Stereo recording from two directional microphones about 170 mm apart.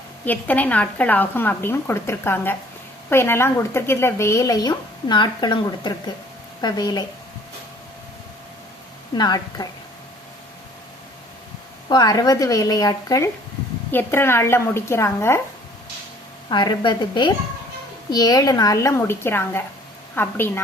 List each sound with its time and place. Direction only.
0.3 s a woman's voice: 10° left (ahead or behind)
9.1 s a woman's voice: 25° left (ahead or behind)
11.9 s a woman's voice: 20° left (ahead or behind)
16.5 s a woman's voice: 25° left (ahead or behind)